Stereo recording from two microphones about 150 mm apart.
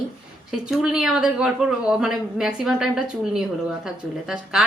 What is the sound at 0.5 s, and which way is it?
A woman's voice, 5° right (ahead or behind).